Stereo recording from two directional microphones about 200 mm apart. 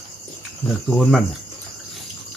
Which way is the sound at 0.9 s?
Centre (ahead or behind).